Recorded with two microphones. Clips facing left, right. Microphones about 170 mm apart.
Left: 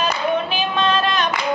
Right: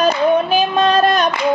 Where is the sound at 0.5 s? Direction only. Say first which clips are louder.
Right 6 dB; 40° right (ahead or behind).